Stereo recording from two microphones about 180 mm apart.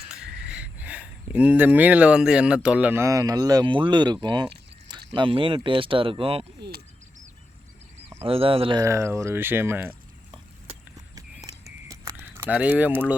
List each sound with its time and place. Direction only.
0.1 s speech: 5° right (ahead or behind); by 6.4 s 30° right (ahead or behind)
6.6 s speech: 60° right (ahead or behind)
8.3 s speech: 30° right (ahead or behind)
8.8 s speech: 15° right (ahead or behind)
11.9 s a sound: 15° right (ahead or behind)